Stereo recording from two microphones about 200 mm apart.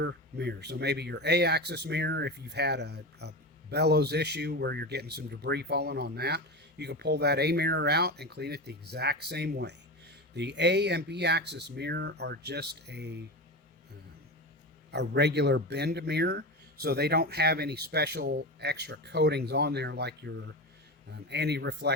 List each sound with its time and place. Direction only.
0.0 s speech: 60° right (ahead or behind)
14.8 s speech: 60° right (ahead or behind)